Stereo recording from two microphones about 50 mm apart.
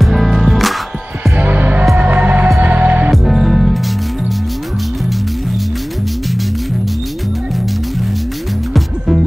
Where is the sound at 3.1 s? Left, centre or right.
Centre.